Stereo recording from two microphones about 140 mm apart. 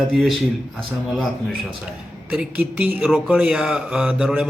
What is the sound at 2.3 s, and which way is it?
A man's voice, 5° right (ahead or behind).